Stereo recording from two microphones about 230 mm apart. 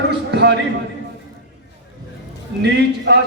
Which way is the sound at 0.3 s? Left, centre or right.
Right.